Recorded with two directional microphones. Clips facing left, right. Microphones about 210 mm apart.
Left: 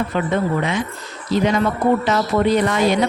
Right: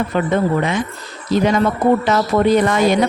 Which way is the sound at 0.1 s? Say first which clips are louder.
Right 4 dB; 45° right (ahead or behind).